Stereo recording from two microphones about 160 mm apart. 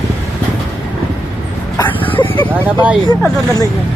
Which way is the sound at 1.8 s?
10° left (ahead or behind).